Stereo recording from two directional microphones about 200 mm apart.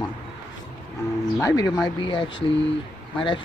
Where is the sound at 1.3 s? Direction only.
15° left (ahead or behind).